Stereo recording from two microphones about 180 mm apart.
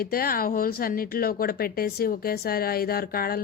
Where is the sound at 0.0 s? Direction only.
55° left (ahead or behind).